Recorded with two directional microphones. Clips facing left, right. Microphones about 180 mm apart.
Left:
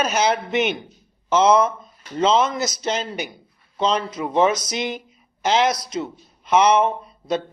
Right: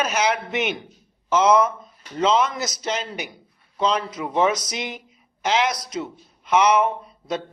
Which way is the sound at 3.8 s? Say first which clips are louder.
Left 1 dB; 30° left (ahead or behind).